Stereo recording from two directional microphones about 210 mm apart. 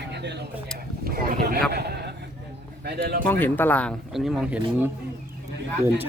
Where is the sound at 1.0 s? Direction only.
45° right (ahead or behind).